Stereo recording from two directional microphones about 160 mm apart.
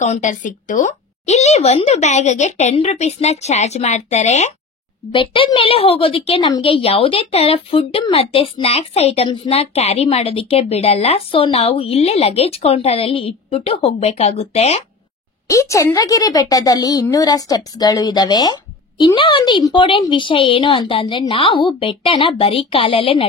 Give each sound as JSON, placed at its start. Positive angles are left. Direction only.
{"t": 0.0, "sound": "a woman's voice", "side_deg": 50}
{"t": 5.1, "sound": "speech", "side_deg": 30}
{"t": 15.4, "sound": "a woman's voice", "side_deg": 20}